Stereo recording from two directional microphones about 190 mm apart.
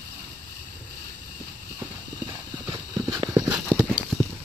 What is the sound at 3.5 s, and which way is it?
Clip-clop, 5° right (ahead or behind).